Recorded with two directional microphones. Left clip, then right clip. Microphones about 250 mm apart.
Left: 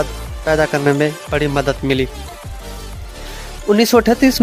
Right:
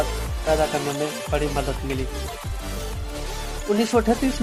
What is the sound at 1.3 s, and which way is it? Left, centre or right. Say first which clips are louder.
Speech: left 7 dB; left.